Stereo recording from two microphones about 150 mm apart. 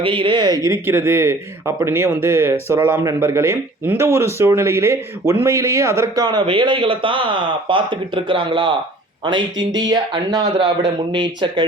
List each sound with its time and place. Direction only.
0.0 s a man's voice: 35° right (ahead or behind)